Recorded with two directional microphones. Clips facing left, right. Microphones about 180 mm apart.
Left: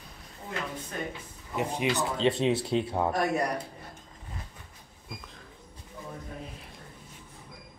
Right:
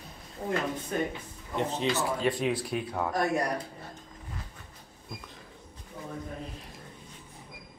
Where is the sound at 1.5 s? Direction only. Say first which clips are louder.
Even; 15° left (ahead or behind).